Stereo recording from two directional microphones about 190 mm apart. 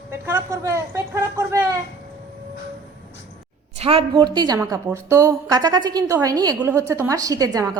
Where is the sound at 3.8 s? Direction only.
30° right (ahead or behind).